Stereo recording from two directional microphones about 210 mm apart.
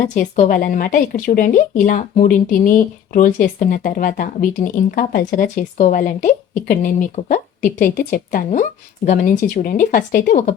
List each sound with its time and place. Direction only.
0.1 s a woman's voice: 40° left (ahead or behind)